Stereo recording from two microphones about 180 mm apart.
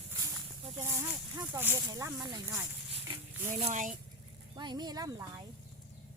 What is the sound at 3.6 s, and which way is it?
Speech, 45° right (ahead or behind).